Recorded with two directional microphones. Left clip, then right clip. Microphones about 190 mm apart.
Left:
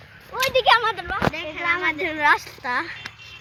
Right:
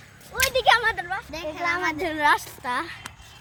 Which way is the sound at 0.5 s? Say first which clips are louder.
Left 2 dB; 45° left (ahead or behind).